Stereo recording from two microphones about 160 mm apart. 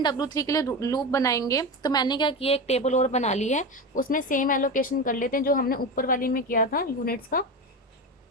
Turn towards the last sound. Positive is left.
turn(degrees=65)  # may be behind; listen again after turning